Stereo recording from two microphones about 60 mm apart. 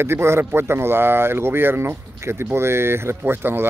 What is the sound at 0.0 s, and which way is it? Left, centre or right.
A man's voice, right.